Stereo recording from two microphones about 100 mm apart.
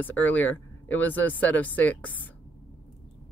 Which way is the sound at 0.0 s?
15° left (ahead or behind).